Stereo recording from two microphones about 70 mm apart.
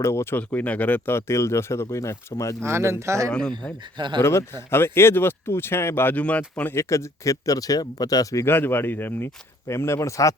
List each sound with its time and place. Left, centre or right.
0.0 s speech: left
0.3 s speech: left
1.1 s speech: left
2.6 s speech: right
3.2 s speech: centre
4.2 s speech: left
6.1 s speech: left
6.7 s speech: left
8.4 s speech: left
9.6 s speech: left